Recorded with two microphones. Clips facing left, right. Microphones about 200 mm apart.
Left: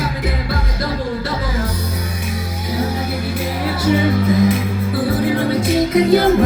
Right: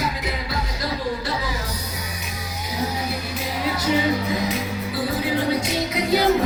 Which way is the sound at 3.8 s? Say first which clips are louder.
Left 6 dB; 50° left (ahead or behind).